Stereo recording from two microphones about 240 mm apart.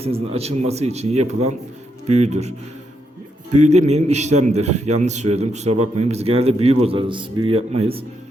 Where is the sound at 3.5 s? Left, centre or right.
Right.